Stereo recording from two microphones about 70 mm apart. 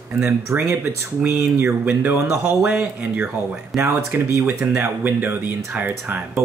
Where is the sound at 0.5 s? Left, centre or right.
Right.